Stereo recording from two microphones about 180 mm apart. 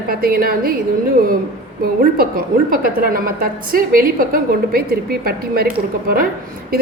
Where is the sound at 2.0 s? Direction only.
55° right (ahead or behind).